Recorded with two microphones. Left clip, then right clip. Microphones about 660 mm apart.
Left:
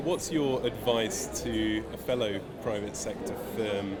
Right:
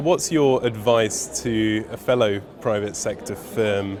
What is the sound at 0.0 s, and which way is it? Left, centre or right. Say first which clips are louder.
Speech: right 11 dB; right.